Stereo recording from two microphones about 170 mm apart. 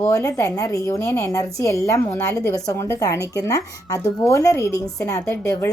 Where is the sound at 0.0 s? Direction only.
20° left (ahead or behind).